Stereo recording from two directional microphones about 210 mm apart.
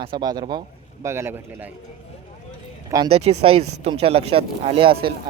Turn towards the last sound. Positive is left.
turn(degrees=-25)  # may be behind; listen again after turning